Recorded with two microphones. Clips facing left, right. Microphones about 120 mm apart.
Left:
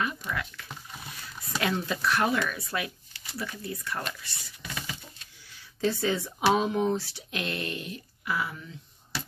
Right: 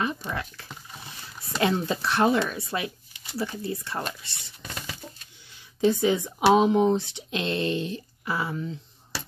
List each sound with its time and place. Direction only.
0.0 s speech: 30° right (ahead or behind)
5.8 s speech: 15° right (ahead or behind)